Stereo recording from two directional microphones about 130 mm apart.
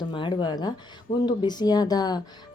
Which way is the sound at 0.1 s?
40° left (ahead or behind).